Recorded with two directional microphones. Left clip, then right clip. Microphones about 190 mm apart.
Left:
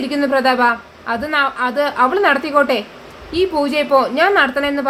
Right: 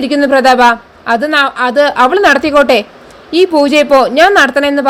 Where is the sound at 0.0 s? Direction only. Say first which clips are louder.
Right 7 dB; 35° right (ahead or behind).